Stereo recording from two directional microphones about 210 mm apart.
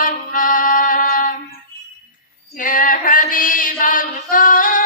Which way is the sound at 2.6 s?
40° left (ahead or behind).